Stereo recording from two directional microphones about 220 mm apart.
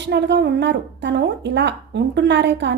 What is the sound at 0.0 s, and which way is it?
A woman's voice, 50° right (ahead or behind).